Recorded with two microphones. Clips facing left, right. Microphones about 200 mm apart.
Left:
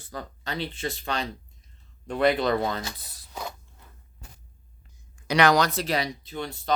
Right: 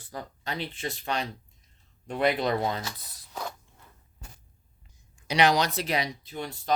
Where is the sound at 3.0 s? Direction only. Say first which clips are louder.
Left 1 dB; 30° left (ahead or behind).